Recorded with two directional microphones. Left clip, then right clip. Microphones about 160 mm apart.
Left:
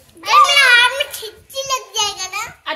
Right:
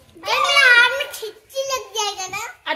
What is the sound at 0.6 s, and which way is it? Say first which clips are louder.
Children playing: left 2 dB; 35° right (ahead or behind).